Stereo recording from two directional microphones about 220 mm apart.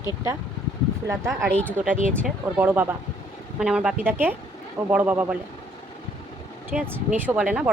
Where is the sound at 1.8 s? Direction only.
35° right (ahead or behind).